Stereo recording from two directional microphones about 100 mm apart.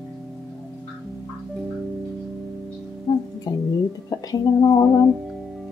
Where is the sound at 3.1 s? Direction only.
40° left (ahead or behind).